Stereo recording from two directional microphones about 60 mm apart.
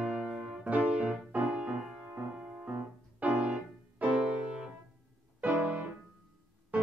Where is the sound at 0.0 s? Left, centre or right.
Centre.